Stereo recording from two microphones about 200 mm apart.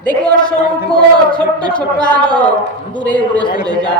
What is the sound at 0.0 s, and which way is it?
A man's voice, 5° left (ahead or behind).